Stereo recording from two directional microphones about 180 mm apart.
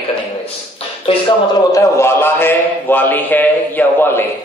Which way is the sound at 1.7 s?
15° left (ahead or behind).